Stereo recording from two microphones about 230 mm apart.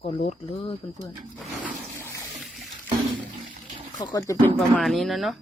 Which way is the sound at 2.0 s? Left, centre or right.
Centre.